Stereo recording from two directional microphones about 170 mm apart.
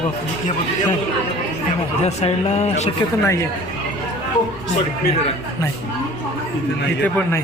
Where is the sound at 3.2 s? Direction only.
15° left (ahead or behind).